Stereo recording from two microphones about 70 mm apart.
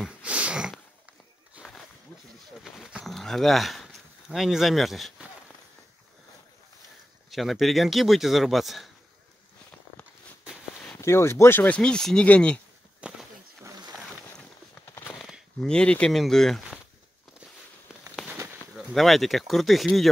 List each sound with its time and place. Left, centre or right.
0.2 s a sound: centre
3.1 s speech: centre
7.2 s speech: centre
11.0 s speech: left
11.6 s speech: centre
13.0 s a sound: centre
15.6 s speech: centre
18.9 s speech: centre